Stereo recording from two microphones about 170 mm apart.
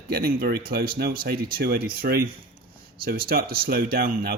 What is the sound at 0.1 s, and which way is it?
Speech, 60° right (ahead or behind).